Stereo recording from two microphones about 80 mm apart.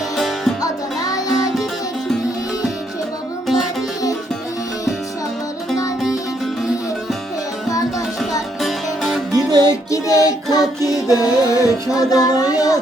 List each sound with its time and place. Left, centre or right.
0.2 s music: centre
0.6 s music: left
1.3 s music: centre
8.2 s music: centre
9.3 s music: right
9.6 s child singing: left
10.8 s music: left
11.9 s speech: left